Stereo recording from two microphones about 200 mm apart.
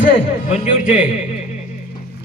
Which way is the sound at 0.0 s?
30° left (ahead or behind).